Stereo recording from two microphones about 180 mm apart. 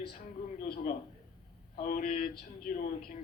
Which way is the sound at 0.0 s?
50° left (ahead or behind).